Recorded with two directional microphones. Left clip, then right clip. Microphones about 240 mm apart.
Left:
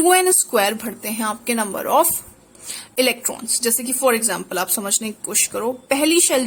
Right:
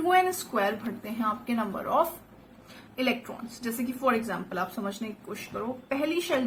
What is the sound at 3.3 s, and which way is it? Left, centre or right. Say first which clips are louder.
Speech: left 13 dB; left.